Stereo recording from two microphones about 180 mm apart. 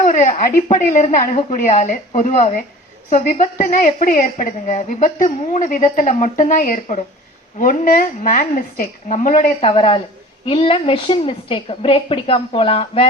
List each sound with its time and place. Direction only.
0.0 s a woman's voice: 45° left (ahead or behind)
9.6 s a woman's voice: 35° left (ahead or behind)